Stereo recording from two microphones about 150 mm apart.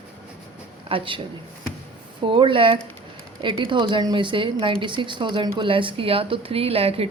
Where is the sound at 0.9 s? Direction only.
35° right (ahead or behind).